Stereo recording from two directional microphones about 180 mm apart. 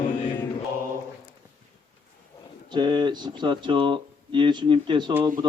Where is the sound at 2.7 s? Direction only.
25° right (ahead or behind).